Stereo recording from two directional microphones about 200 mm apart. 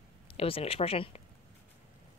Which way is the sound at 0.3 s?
30° left (ahead or behind).